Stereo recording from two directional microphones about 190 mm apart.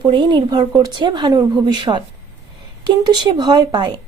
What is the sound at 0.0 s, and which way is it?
A woman's voice, 25° right (ahead or behind).